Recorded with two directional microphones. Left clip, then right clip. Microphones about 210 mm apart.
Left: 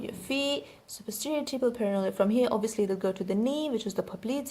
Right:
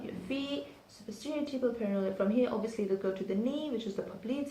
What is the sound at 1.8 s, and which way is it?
A woman's voice, 50° left (ahead or behind).